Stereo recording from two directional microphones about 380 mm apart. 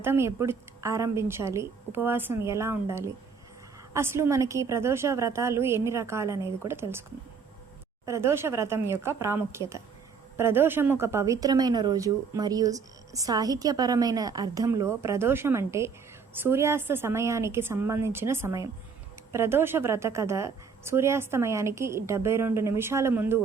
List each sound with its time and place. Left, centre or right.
0.0 s a woman's voice: centre
8.0 s a woman's voice: centre